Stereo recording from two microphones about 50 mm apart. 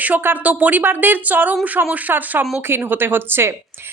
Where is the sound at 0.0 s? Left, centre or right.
Right.